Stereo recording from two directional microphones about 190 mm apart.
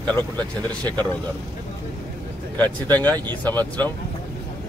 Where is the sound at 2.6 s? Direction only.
10° left (ahead or behind).